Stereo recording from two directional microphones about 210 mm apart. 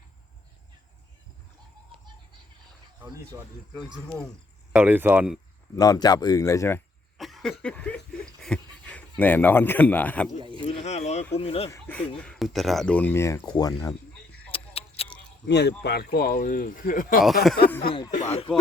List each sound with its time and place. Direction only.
3.0 s speech: 10° right (ahead or behind)
4.7 s speech: 10° right (ahead or behind)
5.7 s speech: 15° left (ahead or behind)
7.2 s cough: centre (ahead or behind)
7.6 s speech: 5° left (ahead or behind)
10.6 s speech: 30° left (ahead or behind)
11.7 s speech: 5° left (ahead or behind)
14.5 s a sound: 25° left (ahead or behind)
15.4 s speech: 55° left (ahead or behind)
18.1 s speech: 30° left (ahead or behind)